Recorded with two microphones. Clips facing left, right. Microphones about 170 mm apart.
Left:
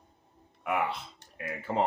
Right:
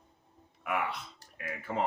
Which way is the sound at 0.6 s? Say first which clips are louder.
Left 3 dB; 30° left (ahead or behind).